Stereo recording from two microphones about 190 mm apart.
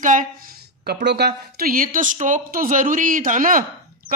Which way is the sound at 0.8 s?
60° right (ahead or behind).